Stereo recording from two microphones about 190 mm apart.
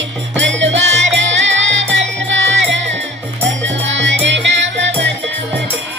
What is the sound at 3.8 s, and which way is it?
Music, 70° right (ahead or behind).